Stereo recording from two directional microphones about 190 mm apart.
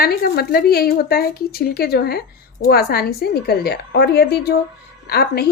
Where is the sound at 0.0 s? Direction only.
50° left (ahead or behind).